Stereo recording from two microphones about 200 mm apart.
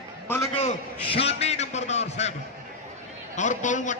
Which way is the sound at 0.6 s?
30° left (ahead or behind).